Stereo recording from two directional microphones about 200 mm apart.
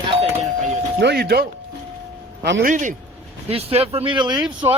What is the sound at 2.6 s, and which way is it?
Speech, 40° right (ahead or behind).